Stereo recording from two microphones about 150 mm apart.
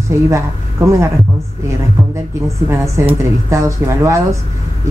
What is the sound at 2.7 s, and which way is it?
A woman's voice, 20° right (ahead or behind).